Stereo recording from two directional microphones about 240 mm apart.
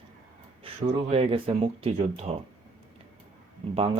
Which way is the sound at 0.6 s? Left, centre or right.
Right.